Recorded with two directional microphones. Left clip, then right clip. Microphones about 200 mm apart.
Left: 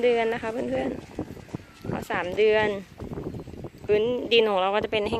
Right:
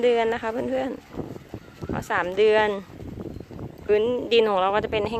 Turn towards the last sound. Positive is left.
turn(degrees=0)  # may be behind; listen again after turning